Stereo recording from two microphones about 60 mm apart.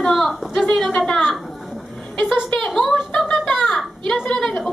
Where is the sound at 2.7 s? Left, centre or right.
Centre.